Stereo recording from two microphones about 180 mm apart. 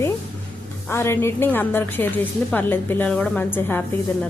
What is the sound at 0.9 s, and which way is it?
A woman's voice, 15° left (ahead or behind).